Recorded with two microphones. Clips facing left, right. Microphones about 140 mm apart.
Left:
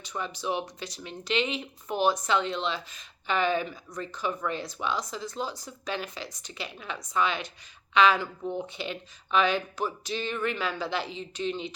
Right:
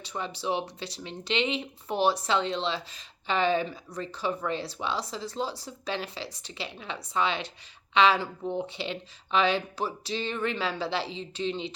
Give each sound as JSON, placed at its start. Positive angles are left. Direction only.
{"t": 0.0, "sound": "speech", "side_deg": -30}